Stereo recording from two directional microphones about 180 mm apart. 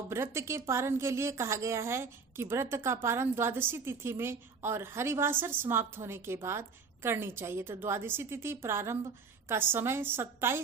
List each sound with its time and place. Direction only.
0.1 s a woman's voice: 15° right (ahead or behind)